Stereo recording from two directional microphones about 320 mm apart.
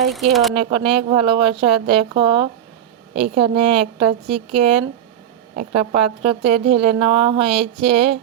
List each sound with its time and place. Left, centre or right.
0.1 s speech: centre
0.5 s a woman's voice: centre